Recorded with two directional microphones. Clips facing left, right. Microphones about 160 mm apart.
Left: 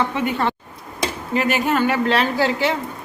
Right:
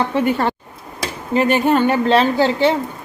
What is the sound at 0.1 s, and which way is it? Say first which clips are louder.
Speech: right 4 dB; 40° right (ahead or behind).